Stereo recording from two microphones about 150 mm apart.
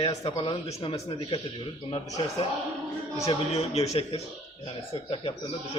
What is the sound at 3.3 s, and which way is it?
Speech, 40° left (ahead or behind).